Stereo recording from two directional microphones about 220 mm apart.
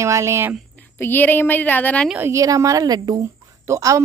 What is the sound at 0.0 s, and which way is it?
Speech, 15° right (ahead or behind).